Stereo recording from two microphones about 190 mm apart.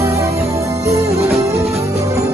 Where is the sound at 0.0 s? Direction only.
15° right (ahead or behind).